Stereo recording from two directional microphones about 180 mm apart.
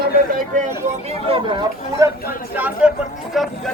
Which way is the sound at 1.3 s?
30° right (ahead or behind).